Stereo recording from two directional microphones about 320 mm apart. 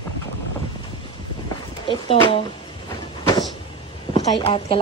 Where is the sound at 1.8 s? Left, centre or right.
Centre.